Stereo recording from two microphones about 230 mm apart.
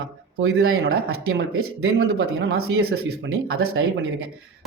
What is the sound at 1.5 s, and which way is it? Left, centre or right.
Speech, right.